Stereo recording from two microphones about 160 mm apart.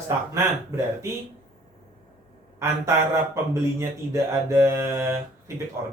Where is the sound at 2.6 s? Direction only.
15° right (ahead or behind).